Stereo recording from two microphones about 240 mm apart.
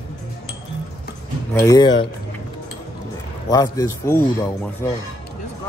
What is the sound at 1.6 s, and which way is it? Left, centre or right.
Speech, centre.